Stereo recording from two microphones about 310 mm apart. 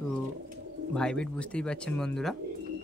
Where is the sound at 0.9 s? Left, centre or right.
Centre.